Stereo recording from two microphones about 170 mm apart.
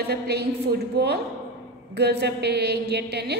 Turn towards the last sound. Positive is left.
turn(degrees=-75)  # may be behind; listen again after turning